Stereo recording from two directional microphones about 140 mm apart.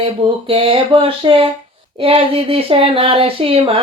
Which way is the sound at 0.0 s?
40° right (ahead or behind).